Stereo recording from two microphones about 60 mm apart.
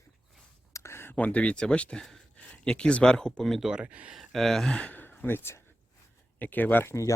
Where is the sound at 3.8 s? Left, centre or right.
Right.